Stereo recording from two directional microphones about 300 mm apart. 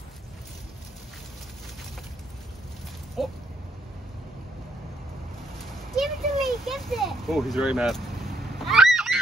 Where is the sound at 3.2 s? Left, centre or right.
Centre.